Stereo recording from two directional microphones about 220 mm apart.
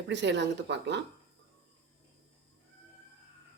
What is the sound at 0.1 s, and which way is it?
Speech, 55° right (ahead or behind).